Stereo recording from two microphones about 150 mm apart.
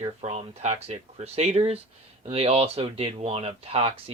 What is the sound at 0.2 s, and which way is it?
Speech, 45° right (ahead or behind).